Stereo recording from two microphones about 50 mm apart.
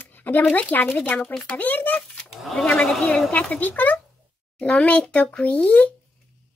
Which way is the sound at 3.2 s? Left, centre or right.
Left.